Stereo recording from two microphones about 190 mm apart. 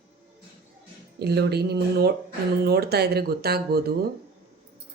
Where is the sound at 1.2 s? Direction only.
60° right (ahead or behind).